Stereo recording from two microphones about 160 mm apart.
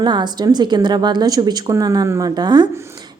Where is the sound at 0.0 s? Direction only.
25° right (ahead or behind).